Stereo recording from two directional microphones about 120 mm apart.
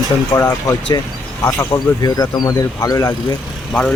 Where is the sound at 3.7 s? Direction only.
10° left (ahead or behind).